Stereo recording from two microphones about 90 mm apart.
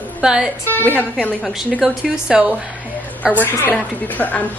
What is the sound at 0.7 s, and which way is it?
Speech, 20° left (ahead or behind).